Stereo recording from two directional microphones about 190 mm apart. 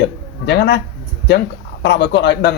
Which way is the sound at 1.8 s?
60° left (ahead or behind).